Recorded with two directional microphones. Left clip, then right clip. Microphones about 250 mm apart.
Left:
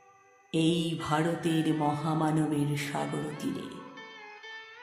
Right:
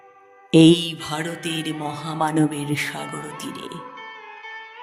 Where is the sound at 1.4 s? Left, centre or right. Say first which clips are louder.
Right 1 dB; right.